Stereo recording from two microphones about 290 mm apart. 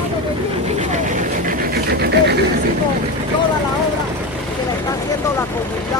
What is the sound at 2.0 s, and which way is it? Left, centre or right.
Dog, right.